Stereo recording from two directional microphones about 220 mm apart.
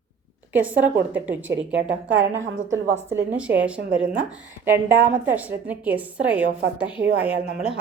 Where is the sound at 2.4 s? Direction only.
60° right (ahead or behind).